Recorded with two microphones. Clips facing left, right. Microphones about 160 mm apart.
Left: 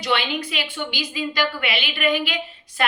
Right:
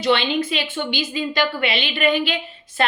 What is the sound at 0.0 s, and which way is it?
Speech, 25° right (ahead or behind).